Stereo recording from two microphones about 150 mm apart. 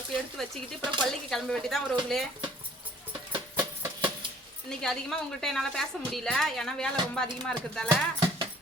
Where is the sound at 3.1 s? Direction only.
30° right (ahead or behind).